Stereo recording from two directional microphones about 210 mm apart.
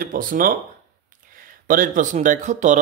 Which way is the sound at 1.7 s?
40° right (ahead or behind).